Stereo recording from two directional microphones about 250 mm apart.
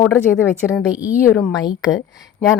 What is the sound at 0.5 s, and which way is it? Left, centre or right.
Speech, centre.